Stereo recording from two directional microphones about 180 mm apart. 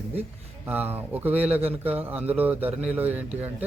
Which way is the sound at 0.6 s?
10° right (ahead or behind).